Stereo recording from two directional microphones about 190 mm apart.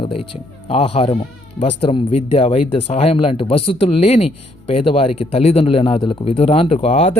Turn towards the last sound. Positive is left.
turn(degrees=30)  # may be behind; listen again after turning